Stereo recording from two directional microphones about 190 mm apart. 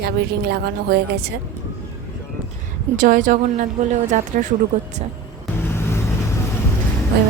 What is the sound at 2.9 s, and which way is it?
A woman's voice, 45° right (ahead or behind).